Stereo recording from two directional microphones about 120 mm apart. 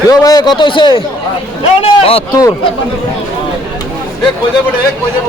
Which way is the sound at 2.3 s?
30° left (ahead or behind).